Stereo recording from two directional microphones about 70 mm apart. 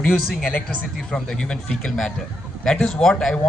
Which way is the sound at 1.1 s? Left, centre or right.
Centre.